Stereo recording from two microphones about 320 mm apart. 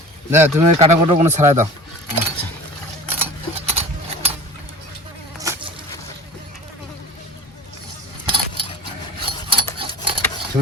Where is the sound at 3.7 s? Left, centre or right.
Centre.